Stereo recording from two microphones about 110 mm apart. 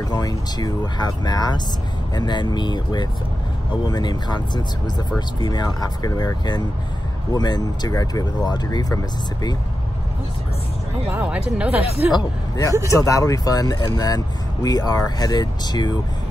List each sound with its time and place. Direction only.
0.1 s speech: 35° left (ahead or behind)
11.1 s speech: 15° right (ahead or behind)
12.1 s speech: 40° left (ahead or behind)